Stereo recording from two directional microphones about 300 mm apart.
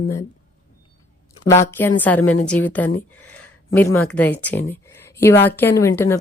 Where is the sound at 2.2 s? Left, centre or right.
Left.